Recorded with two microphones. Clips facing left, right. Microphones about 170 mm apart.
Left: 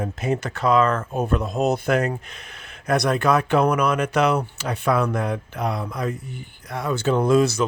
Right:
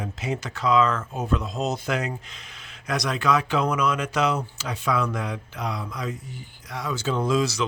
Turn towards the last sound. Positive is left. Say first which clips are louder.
# left 6 dB
turn(degrees=55)  # may be behind; listen again after turning